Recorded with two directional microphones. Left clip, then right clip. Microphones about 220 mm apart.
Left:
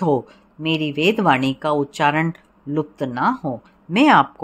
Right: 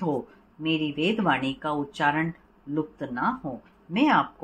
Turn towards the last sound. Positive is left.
turn(degrees=50)  # may be behind; listen again after turning